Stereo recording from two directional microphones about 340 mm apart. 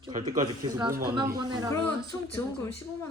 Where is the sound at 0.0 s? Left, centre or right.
Right.